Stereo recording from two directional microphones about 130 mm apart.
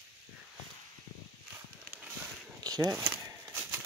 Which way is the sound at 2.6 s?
30° right (ahead or behind).